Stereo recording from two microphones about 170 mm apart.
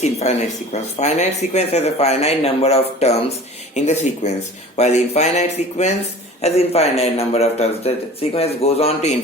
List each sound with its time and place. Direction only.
0.0 s speech: 40° left (ahead or behind)